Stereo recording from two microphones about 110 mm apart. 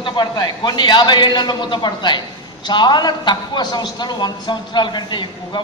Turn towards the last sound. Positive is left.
turn(degrees=45)  # may be behind; listen again after turning